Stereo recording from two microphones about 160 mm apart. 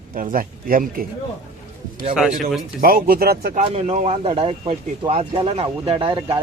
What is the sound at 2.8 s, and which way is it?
Speech, 65° right (ahead or behind).